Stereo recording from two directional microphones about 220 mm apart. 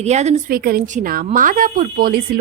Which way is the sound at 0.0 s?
30° right (ahead or behind).